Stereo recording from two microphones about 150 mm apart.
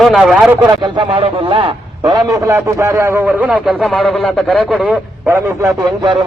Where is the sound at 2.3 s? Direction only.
20° right (ahead or behind).